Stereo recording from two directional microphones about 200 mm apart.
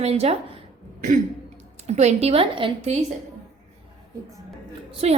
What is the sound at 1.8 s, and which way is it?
A woman's voice, 35° right (ahead or behind).